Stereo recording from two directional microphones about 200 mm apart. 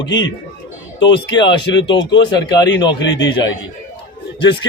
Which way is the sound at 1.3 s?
25° left (ahead or behind).